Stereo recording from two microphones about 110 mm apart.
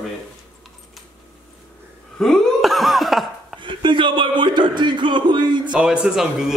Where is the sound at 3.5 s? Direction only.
50° right (ahead or behind).